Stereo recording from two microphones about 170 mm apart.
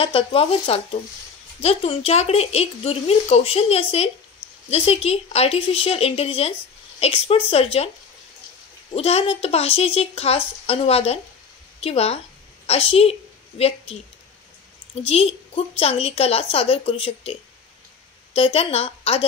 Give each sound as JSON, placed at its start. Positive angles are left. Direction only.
{"t": 0.0, "sound": "speech", "side_deg": 35}
{"t": 8.9, "sound": "a woman's voice", "side_deg": 35}
{"t": 15.0, "sound": "a woman's voice", "side_deg": 35}